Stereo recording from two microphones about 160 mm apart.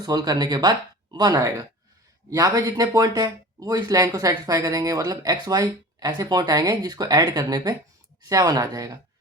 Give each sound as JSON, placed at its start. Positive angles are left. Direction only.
{"t": 0.0, "sound": "speech", "side_deg": -25}